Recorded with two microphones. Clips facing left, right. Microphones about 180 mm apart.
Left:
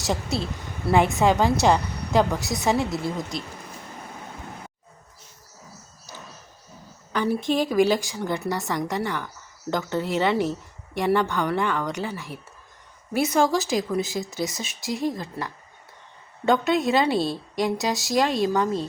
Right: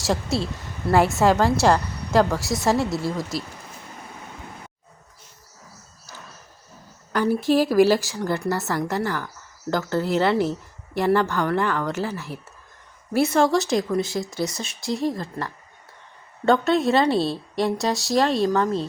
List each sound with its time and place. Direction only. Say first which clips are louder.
0.0 s a woman's voice: right 3 dB; centre (ahead or behind)
7.1 s a woman's voice: right 4 dB; 5° right (ahead or behind)
15.1 s a woman's voice: right 2 dB; 15° left (ahead or behind)
16.5 s a woman's voice: right 2 dB; centre (ahead or behind)